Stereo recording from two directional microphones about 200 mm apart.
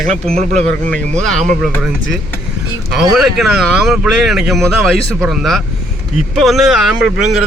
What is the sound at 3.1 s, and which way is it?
Speech, centre (ahead or behind).